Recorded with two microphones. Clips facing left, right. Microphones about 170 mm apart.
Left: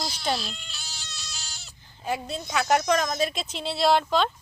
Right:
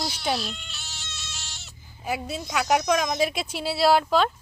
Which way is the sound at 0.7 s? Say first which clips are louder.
Right 1 dB; centre (ahead or behind).